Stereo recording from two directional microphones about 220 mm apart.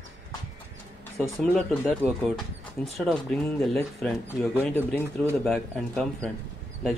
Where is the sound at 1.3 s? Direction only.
5° left (ahead or behind).